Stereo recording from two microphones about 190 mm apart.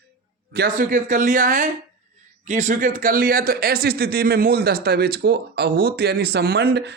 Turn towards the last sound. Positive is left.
turn(degrees=-60)  # may be behind; listen again after turning